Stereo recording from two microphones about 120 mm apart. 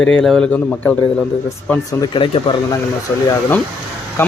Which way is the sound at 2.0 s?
45° left (ahead or behind).